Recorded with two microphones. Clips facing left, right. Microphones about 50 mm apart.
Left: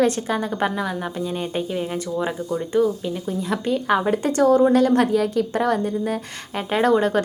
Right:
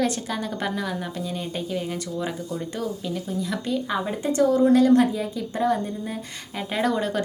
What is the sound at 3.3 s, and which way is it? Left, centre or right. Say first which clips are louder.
Speech: left 5 dB; left.